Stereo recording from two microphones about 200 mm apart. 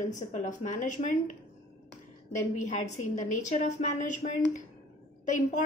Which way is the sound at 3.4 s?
35° left (ahead or behind).